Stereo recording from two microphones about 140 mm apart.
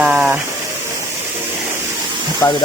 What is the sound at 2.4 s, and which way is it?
Speech, 15° left (ahead or behind).